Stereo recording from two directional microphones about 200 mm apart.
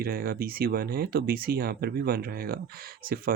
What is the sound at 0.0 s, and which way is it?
Speech, 50° right (ahead or behind).